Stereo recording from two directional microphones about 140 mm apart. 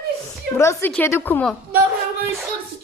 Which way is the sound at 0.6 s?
20° left (ahead or behind).